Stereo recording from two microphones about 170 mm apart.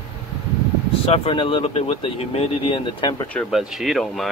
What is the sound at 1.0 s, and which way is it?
Speech, 35° left (ahead or behind).